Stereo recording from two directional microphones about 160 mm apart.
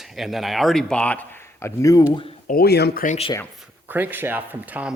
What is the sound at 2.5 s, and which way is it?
Speech, 80° left.